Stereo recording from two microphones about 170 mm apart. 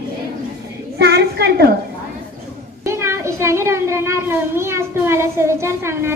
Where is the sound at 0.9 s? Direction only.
70° right (ahead or behind).